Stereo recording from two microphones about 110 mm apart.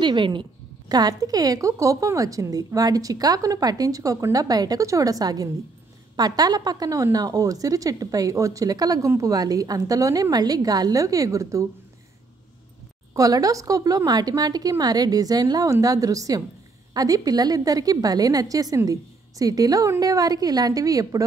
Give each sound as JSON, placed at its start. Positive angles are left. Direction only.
{"t": 0.0, "sound": "a woman's voice", "side_deg": -45}
{"t": 13.1, "sound": "a woman's voice", "side_deg": -35}